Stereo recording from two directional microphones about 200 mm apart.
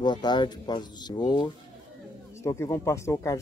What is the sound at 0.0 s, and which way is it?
Speech, 20° left (ahead or behind).